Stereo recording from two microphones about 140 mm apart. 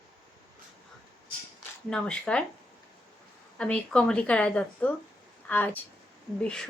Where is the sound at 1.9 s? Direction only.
5° left (ahead or behind).